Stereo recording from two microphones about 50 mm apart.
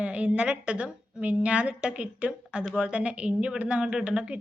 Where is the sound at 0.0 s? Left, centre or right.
Right.